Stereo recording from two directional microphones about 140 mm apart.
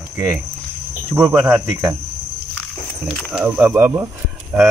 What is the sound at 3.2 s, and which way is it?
Speech, 5° right (ahead or behind).